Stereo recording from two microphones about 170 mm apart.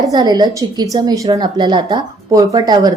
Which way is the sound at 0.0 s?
20° right (ahead or behind).